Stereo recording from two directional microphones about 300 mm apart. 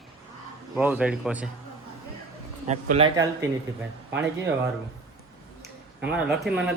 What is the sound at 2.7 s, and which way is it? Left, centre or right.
Speech, right.